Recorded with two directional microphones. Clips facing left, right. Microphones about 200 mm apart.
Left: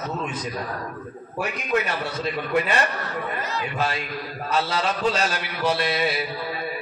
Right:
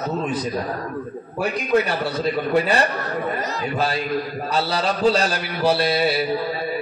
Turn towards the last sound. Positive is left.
turn(degrees=-35)  # may be behind; listen again after turning